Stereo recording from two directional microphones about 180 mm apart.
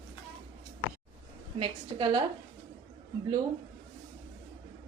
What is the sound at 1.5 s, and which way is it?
Speech, 30° right (ahead or behind).